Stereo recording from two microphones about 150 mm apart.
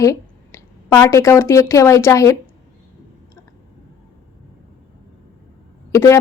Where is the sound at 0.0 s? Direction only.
20° left (ahead or behind).